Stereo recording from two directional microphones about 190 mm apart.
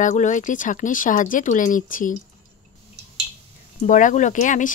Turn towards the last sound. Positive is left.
turn(degrees=40)  # may be behind; listen again after turning